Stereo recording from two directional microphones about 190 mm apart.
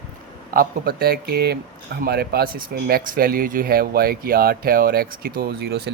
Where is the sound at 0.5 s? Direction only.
50° right (ahead or behind).